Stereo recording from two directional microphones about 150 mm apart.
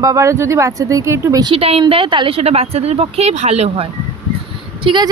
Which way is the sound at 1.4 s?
40° right (ahead or behind).